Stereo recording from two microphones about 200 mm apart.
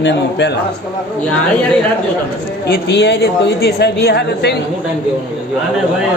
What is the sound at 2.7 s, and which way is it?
A woman's voice, 55° left (ahead or behind).